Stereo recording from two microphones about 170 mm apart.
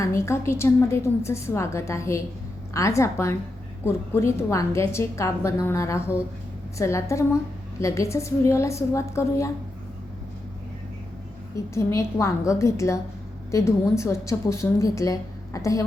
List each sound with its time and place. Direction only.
0.0 s a woman's voice: 15° left (ahead or behind)
11.5 s a woman's voice: 15° left (ahead or behind)